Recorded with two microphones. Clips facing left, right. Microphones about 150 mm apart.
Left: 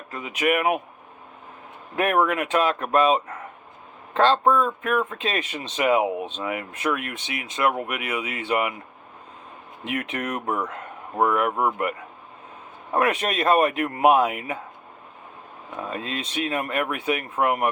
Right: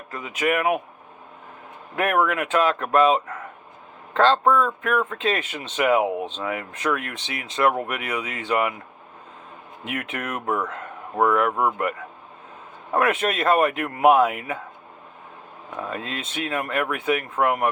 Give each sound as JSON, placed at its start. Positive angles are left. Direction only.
{"t": 0.1, "sound": "speech", "side_deg": 15}
{"t": 2.0, "sound": "a man's voice", "side_deg": 20}
{"t": 9.8, "sound": "speech", "side_deg": 25}
{"t": 13.1, "sound": "a man's voice", "side_deg": 20}
{"t": 15.8, "sound": "a man's voice", "side_deg": 20}